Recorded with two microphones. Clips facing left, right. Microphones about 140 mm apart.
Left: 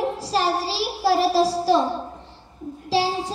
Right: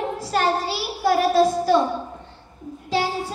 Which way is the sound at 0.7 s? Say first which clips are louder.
Even; 30° left (ahead or behind).